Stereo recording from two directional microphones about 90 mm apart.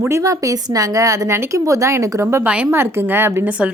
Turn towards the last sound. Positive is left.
turn(degrees=-15)  # may be behind; listen again after turning